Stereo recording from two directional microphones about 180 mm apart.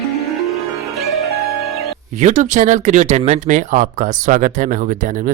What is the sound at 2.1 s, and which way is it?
Speech, 40° right (ahead or behind).